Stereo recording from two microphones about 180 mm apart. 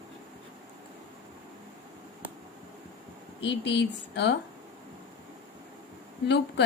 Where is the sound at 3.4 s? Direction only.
75° left (ahead or behind).